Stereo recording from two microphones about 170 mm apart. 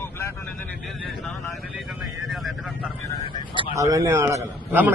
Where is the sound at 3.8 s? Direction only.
20° right (ahead or behind).